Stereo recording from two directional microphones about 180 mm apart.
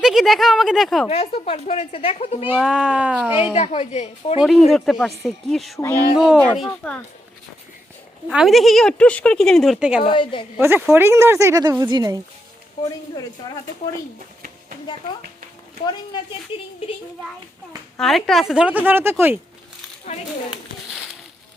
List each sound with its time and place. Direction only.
0.0 s a woman's voice: centre (ahead or behind)
1.0 s speech: 35° left (ahead or behind)
2.6 s a woman's voice: 5° right (ahead or behind)
3.5 s speech: 35° left (ahead or behind)
4.4 s a woman's voice: centre (ahead or behind)
8.3 s a woman's voice: centre (ahead or behind)
10.0 s a woman's voice: 30° left (ahead or behind)
10.6 s speech: 10° right (ahead or behind)
13.4 s a woman's voice: 25° left (ahead or behind)
16.5 s a woman's voice: 30° left (ahead or behind)
17.9 s a woman's voice: centre (ahead or behind)